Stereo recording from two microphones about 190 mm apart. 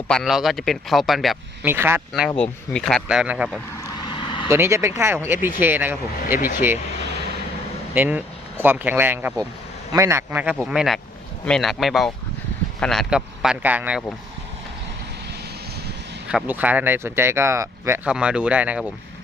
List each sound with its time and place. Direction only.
0.1 s a man's voice: centre (ahead or behind)
1.6 s speech: 10° right (ahead or behind)
2.4 s a man's voice: 5° left (ahead or behind)
4.1 s vehicle: 25° left (ahead or behind)
4.4 s speech: 15° right (ahead or behind)
7.9 s a man's voice: 10° right (ahead or behind)
16.3 s speech: 10° right (ahead or behind)